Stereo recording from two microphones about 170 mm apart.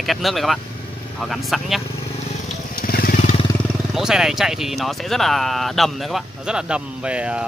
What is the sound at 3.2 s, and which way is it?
Vehicle, 35° left (ahead or behind).